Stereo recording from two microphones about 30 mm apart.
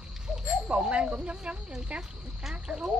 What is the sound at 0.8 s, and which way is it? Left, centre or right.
Snake, right.